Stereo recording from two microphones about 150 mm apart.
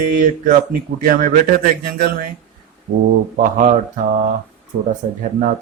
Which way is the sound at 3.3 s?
55° right (ahead or behind).